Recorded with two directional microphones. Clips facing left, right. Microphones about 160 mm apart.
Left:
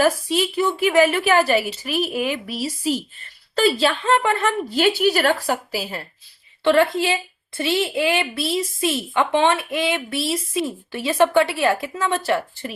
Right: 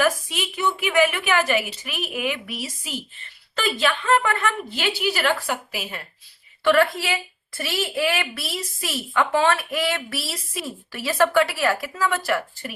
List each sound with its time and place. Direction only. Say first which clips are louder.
0.0 s a woman's voice: left 4 dB; 35° left (ahead or behind)
6.7 s a woman's voice: left 2 dB; 20° left (ahead or behind)